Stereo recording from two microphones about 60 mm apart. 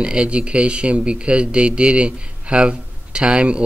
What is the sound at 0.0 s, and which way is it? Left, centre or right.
Speech, centre.